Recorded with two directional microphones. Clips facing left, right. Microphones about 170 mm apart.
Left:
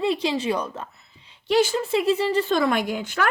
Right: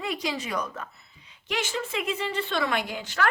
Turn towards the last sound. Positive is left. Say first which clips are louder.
# left 4 dB
turn(degrees=50)  # may be behind; listen again after turning